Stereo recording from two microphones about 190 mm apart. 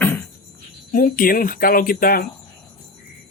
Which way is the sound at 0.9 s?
50° left (ahead or behind).